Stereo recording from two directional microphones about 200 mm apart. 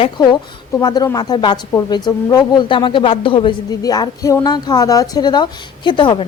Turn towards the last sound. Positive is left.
turn(degrees=25)  # may be behind; listen again after turning